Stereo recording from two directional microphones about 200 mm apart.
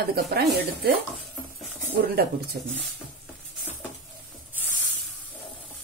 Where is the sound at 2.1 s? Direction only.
50° right (ahead or behind).